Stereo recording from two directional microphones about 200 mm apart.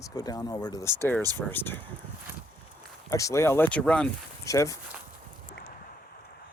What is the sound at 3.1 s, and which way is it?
Speech, 15° left (ahead or behind).